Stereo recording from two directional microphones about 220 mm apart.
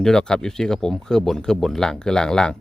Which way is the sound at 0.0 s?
5° left (ahead or behind).